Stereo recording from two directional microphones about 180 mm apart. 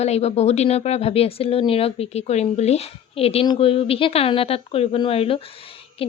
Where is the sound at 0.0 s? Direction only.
35° left (ahead or behind).